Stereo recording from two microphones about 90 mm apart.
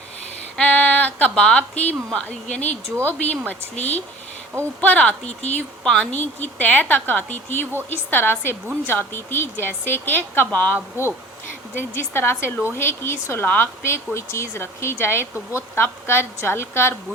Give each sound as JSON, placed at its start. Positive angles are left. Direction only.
{"t": 0.5, "sound": "a woman's voice", "side_deg": 15}
{"t": 4.8, "sound": "speech", "side_deg": 15}
{"t": 6.1, "sound": "a woman's voice", "side_deg": 20}
{"t": 10.8, "sound": "speech", "side_deg": -25}
{"t": 11.7, "sound": "a woman's voice", "side_deg": 25}